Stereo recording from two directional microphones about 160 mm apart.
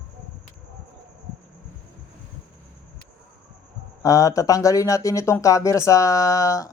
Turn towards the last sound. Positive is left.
turn(degrees=20)  # may be behind; listen again after turning